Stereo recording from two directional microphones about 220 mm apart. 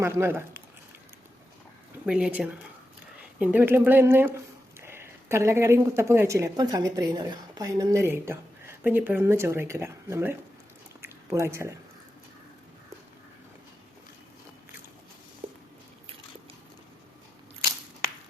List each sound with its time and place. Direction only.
0.0 s speech: 10° right (ahead or behind)
2.0 s a woman's voice: 5° right (ahead or behind)
11.0 s a sound: 15° right (ahead or behind)
15.4 s squish: 25° right (ahead or behind)